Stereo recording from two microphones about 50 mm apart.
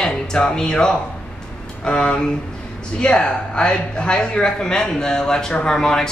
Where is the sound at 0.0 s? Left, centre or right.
Centre.